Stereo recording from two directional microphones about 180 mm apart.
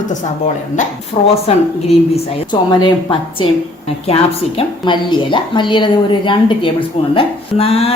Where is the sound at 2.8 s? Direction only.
30° left (ahead or behind).